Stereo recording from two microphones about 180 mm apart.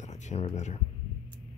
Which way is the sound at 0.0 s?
40° left (ahead or behind).